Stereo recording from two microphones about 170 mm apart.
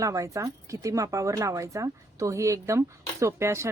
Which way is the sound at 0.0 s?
20° right (ahead or behind).